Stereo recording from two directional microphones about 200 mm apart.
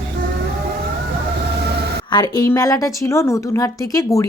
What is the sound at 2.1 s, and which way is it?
A woman's voice, 20° left (ahead or behind).